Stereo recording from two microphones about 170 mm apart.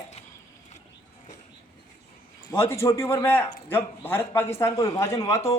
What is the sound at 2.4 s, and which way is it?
A man's voice, 15° left (ahead or behind).